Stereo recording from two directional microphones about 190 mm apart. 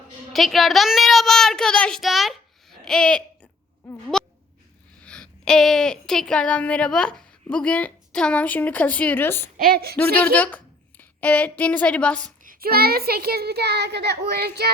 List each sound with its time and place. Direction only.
0.3 s a child's voice: centre (ahead or behind)
9.6 s speech: 55° right (ahead or behind)
10.2 s a woman's voice: 10° left (ahead or behind)
12.5 s a child's voice: 55° right (ahead or behind)